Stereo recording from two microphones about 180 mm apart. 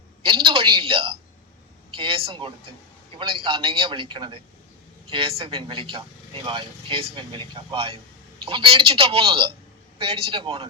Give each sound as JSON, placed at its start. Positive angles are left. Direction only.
{"t": 0.2, "sound": "a man's voice", "side_deg": -30}